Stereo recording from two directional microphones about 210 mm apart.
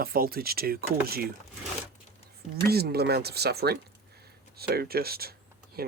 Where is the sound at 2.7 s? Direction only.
50° right (ahead or behind).